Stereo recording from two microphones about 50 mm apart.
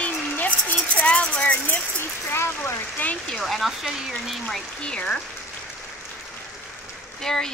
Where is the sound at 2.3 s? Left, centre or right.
Left.